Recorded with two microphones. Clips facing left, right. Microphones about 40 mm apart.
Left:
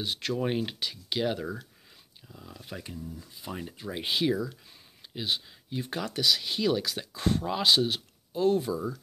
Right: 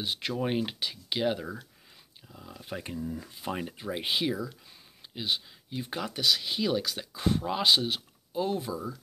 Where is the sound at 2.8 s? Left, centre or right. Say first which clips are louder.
Right 5 dB; right.